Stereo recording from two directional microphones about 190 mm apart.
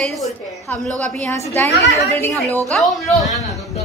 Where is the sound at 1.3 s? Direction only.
15° left (ahead or behind).